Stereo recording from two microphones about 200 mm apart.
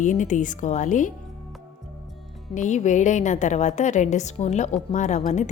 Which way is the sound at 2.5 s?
35° left (ahead or behind).